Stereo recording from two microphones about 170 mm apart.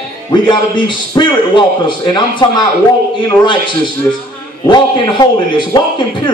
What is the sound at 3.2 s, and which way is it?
Speech, 30° left (ahead or behind).